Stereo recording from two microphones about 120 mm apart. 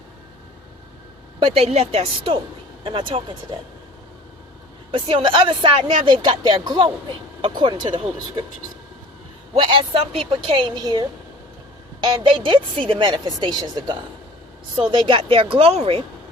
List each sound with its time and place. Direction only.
1.4 s a woman's voice: 60° right (ahead or behind)
4.9 s a woman's voice: 45° right (ahead or behind)
9.6 s a woman's voice: 45° right (ahead or behind)